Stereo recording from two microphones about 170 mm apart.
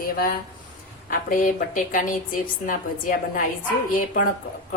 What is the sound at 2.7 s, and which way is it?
Music, 55° left (ahead or behind).